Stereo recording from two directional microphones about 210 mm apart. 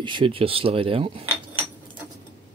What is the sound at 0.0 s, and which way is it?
Speech, 25° right (ahead or behind).